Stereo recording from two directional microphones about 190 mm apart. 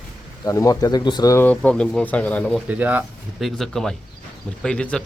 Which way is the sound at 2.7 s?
10° right (ahead or behind).